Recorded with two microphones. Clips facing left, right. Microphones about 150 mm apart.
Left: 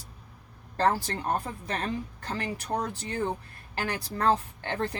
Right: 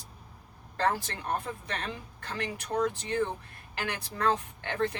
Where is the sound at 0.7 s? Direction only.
35° left (ahead or behind).